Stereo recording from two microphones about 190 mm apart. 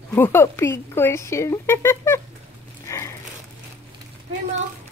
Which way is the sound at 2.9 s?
15° left (ahead or behind).